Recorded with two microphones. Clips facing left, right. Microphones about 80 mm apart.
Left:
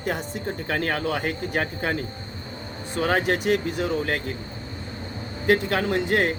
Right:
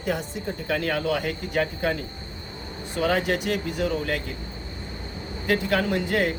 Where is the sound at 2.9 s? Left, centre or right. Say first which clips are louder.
Left 1 dB; left.